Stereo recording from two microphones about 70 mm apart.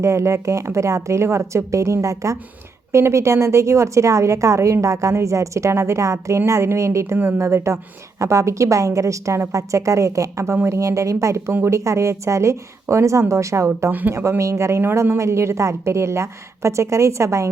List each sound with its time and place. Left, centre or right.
0.0 s a woman's voice: right
15.2 s a woman's voice: right